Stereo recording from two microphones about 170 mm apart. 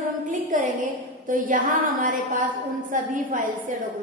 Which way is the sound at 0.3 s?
50° right (ahead or behind).